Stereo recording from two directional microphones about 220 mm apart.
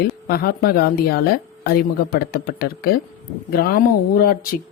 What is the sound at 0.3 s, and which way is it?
Speech, 45° left (ahead or behind).